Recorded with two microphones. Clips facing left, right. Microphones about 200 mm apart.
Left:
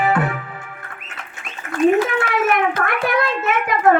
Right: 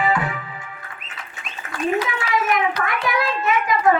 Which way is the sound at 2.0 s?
50° left (ahead or behind).